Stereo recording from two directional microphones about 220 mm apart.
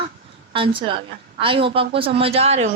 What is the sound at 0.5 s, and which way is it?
A woman's voice, 25° right (ahead or behind).